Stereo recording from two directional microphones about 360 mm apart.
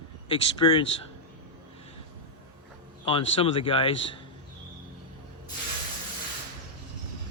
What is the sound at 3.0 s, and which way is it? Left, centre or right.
Speech, centre.